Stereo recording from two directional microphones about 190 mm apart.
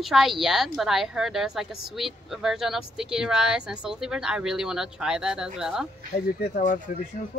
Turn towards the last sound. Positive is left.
turn(degrees=45)  # may be behind; listen again after turning